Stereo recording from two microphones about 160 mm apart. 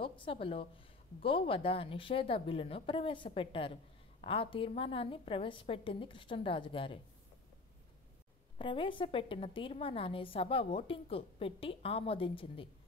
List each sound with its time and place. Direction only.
0.0 s a woman's voice: 35° left (ahead or behind)
8.5 s a woman's voice: 30° left (ahead or behind)